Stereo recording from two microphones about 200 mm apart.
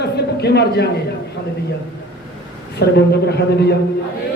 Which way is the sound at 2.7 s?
55° left (ahead or behind).